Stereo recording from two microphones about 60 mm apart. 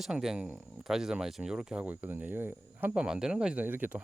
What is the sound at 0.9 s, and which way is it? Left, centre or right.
Speech, centre.